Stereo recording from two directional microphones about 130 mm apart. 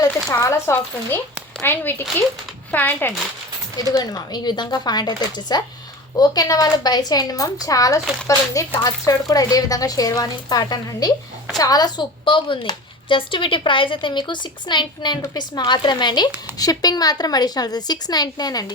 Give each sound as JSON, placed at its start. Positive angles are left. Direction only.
{"t": 0.3, "sound": "a woman's voice", "side_deg": 25}
{"t": 3.9, "sound": "a woman's voice", "side_deg": 30}